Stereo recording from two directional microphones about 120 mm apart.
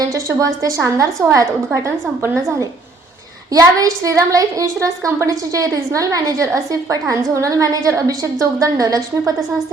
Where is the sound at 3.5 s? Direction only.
30° right (ahead or behind).